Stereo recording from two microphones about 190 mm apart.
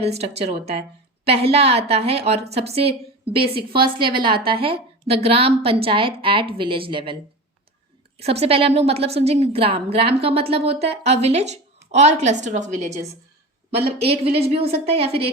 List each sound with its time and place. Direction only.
0.0 s a woman's voice: 30° right (ahead or behind)
8.2 s a woman's voice: 30° right (ahead or behind)